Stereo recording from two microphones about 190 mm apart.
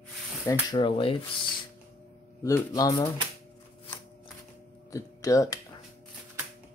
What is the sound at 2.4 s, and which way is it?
Speech, 15° left (ahead or behind).